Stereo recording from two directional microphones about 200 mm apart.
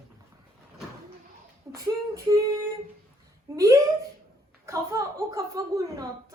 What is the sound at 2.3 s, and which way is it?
A woman's voice, 15° right (ahead or behind).